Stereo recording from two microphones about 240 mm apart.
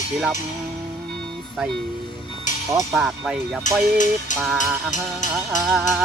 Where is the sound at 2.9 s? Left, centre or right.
Centre.